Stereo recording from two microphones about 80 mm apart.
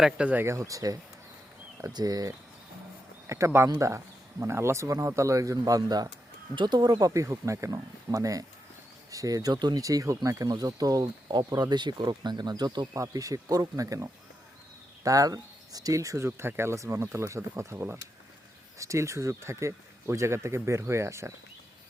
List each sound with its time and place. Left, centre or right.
0.0 s speech: centre
0.3 s speech: right
1.9 s speech: right
3.2 s speech: right
12.9 s speech: right